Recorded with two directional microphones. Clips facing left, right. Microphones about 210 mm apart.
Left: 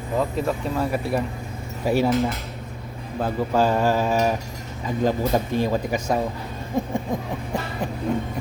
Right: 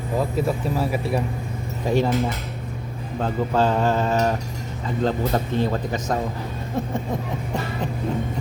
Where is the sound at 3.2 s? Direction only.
10° left (ahead or behind).